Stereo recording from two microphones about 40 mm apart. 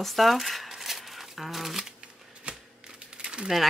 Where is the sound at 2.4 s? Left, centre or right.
Right.